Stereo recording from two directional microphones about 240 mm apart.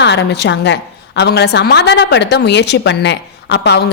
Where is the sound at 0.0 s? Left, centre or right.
Left.